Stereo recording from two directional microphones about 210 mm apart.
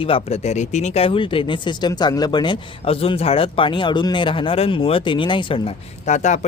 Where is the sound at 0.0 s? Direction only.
25° left (ahead or behind).